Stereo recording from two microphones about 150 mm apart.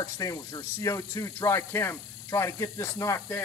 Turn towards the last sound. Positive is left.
turn(degrees=20)  # may be behind; listen again after turning